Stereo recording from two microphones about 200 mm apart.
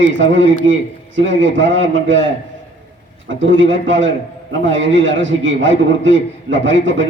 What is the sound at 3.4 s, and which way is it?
A man's voice, 70° right (ahead or behind).